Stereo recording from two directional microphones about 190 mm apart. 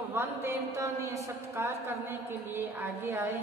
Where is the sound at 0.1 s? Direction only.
10° right (ahead or behind).